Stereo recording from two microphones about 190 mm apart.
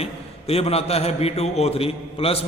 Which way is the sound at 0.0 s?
30° left (ahead or behind).